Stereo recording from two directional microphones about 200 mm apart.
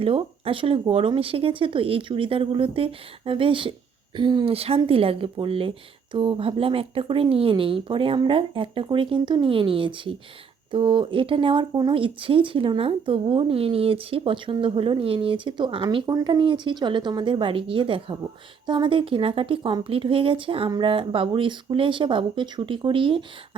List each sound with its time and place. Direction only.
0.0 s speech: 30° right (ahead or behind)